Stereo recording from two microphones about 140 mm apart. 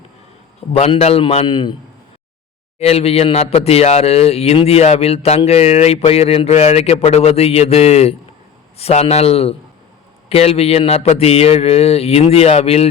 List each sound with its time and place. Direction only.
0.7 s speech: 45° left (ahead or behind)
1.5 s a man's voice: 35° left (ahead or behind)
2.7 s speech: 45° left (ahead or behind)